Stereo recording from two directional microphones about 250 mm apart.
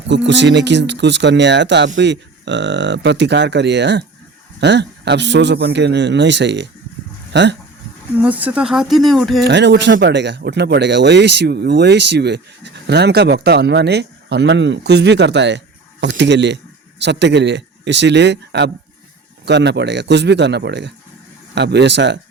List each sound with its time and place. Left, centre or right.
0.1 s speech: right
8.2 s speech: centre
9.4 s speech: right